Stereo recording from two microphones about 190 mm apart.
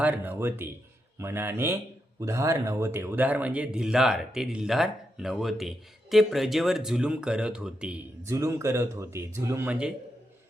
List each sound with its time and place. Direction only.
0.0 s a man's voice: 10° right (ahead or behind)